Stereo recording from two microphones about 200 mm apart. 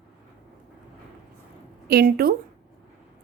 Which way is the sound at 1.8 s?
50° right (ahead or behind).